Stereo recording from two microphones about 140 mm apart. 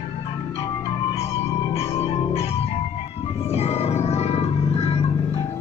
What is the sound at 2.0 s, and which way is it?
Music, 45° left (ahead or behind).